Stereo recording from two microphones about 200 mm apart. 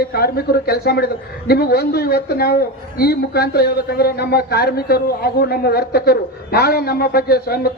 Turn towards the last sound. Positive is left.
turn(degrees=50)  # may be behind; listen again after turning